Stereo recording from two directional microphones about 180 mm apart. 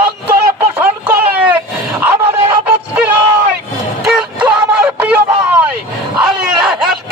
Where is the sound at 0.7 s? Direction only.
10° right (ahead or behind).